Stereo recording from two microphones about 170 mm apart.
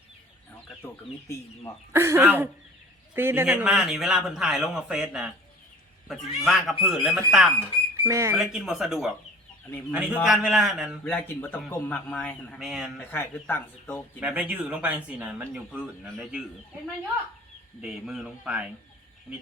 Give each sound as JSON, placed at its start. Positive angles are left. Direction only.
{"t": 1.9, "sound": "a man's voice", "side_deg": -15}
{"t": 8.0, "sound": "speech", "side_deg": -15}
{"t": 8.4, "sound": "a man's voice", "side_deg": 0}
{"t": 11.1, "sound": "a man's voice", "side_deg": 10}
{"t": 13.0, "sound": "a man's voice", "side_deg": 10}
{"t": 14.2, "sound": "speech", "side_deg": -10}
{"t": 17.7, "sound": "a man's voice", "side_deg": -5}